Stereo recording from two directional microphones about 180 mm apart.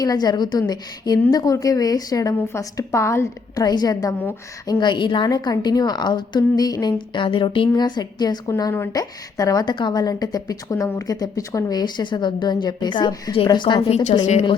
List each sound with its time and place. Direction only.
0.0 s a woman's voice: 20° left (ahead or behind)